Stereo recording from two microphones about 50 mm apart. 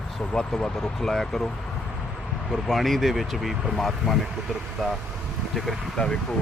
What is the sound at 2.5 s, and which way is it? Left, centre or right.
Speech, centre.